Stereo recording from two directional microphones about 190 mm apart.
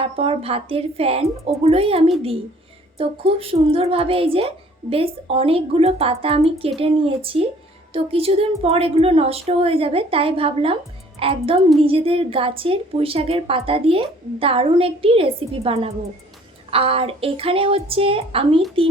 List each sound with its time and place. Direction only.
0.0 s a woman's voice: 30° right (ahead or behind)